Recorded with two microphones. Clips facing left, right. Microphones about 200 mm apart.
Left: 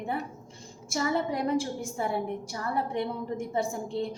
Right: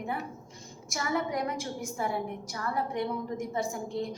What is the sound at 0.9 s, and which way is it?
A woman's voice, 30° left (ahead or behind).